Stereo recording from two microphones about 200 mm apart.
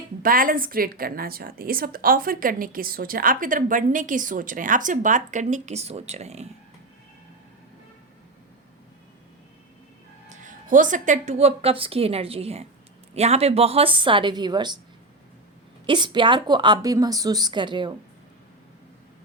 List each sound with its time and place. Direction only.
0.2 s a woman's voice: 45° right (ahead or behind)
10.2 s a woman's voice: 40° right (ahead or behind); by 14.8 s 20° right (ahead or behind)
15.9 s a woman's voice: 25° right (ahead or behind)